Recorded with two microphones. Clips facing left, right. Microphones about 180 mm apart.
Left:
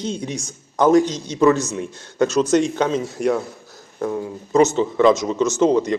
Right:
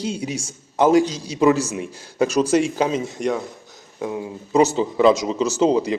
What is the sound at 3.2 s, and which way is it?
Speech, 5° left (ahead or behind).